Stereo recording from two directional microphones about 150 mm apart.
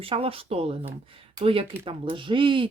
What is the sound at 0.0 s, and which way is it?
Speech, 40° right (ahead or behind).